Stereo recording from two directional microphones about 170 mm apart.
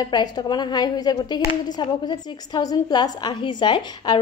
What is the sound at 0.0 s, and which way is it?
Speech, 25° left (ahead or behind).